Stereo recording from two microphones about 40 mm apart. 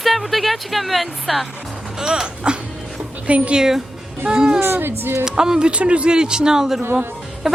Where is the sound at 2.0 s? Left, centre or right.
Centre.